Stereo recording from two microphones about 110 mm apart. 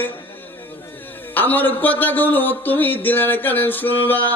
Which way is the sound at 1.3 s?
15° left (ahead or behind).